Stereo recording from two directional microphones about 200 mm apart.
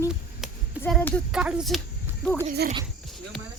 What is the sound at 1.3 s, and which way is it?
Speech, 5° right (ahead or behind).